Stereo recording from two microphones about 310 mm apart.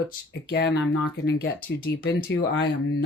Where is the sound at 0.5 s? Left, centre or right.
Left.